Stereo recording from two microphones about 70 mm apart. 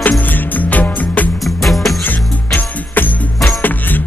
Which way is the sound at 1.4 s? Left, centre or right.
Centre.